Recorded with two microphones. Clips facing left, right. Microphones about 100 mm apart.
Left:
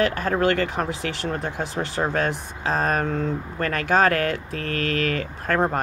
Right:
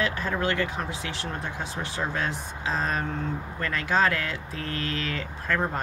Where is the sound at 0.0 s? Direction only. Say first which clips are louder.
Left 6 dB; 60° left (ahead or behind).